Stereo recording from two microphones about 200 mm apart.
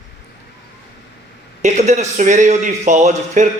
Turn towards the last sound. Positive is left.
turn(degrees=-35)  # may be behind; listen again after turning